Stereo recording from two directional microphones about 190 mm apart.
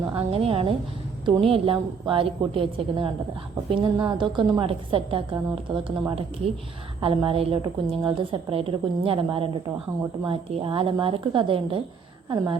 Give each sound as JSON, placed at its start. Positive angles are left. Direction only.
{"t": 0.0, "sound": "a woman's voice", "side_deg": -30}